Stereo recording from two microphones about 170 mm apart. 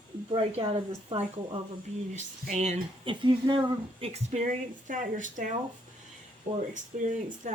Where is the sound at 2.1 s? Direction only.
45° right (ahead or behind).